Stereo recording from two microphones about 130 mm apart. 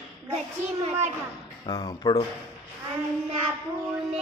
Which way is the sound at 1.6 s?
30° left (ahead or behind).